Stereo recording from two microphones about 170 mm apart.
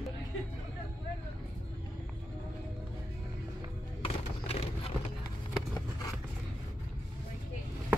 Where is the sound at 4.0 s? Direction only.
35° left (ahead or behind).